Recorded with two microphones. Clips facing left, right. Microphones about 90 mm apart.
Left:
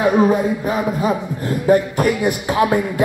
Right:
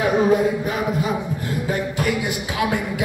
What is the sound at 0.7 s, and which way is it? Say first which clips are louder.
A man's voice: left 4 dB; 35° left (ahead or behind).